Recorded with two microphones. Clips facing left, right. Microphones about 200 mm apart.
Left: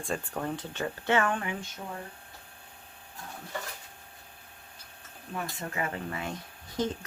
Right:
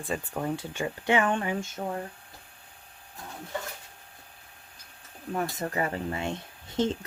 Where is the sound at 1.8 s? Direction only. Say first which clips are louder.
Right 7 dB; 55° right (ahead or behind).